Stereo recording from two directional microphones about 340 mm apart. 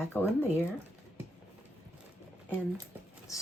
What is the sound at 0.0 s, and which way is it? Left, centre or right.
Speech, centre.